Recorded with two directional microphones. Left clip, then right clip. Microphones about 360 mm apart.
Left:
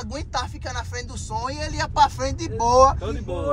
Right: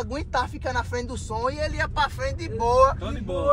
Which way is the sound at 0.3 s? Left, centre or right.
Centre.